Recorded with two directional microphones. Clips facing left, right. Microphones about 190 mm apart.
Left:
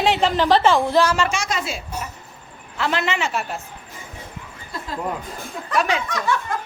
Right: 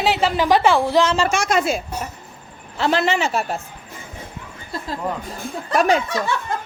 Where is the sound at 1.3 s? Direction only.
55° right (ahead or behind).